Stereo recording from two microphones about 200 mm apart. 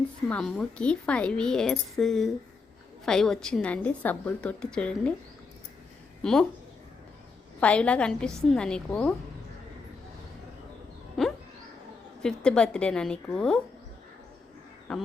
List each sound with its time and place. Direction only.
0.3 s a woman's voice: 5° left (ahead or behind)
7.6 s a woman's voice: 5° left (ahead or behind)
11.2 s a sound: centre (ahead or behind)
12.2 s a woman's voice: 5° left (ahead or behind)
14.9 s a woman's voice: centre (ahead or behind)